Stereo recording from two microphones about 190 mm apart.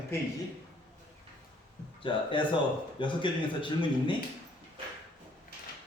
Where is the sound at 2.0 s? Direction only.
25° left (ahead or behind).